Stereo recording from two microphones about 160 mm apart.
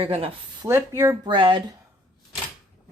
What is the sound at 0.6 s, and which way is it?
Speech, 20° right (ahead or behind).